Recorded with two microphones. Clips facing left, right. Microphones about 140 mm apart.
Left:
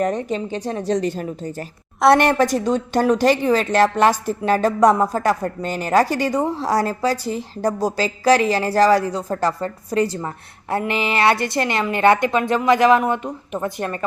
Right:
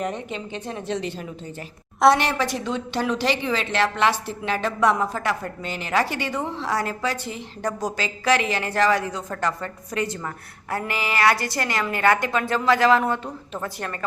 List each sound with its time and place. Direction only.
0.0 s a woman's voice: 40° left (ahead or behind); by 14.0 s 20° left (ahead or behind)